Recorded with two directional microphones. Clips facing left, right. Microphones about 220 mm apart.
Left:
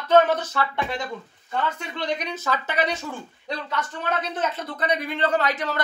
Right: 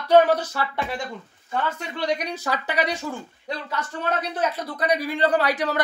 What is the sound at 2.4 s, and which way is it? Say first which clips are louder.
Speech: even; 15° right (ahead or behind).